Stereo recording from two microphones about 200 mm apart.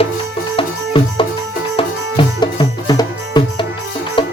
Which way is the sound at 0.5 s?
25° left (ahead or behind).